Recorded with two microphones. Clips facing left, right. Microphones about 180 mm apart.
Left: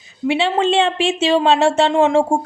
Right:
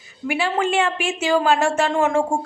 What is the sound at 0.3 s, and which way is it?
Speech, 25° left (ahead or behind).